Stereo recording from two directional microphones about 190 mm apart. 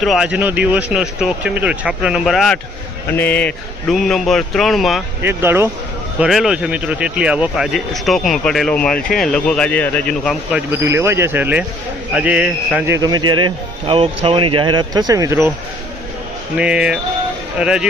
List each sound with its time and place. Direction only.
0.0 s speech: centre (ahead or behind)
5.2 s speech: 10° right (ahead or behind)
6.1 s speech: centre (ahead or behind)
10.5 s speech: 15° right (ahead or behind)
13.0 s speech: 20° right (ahead or behind)
16.6 s speech: 5° right (ahead or behind)